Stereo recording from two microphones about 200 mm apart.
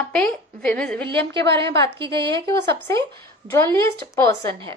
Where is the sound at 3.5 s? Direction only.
15° left (ahead or behind).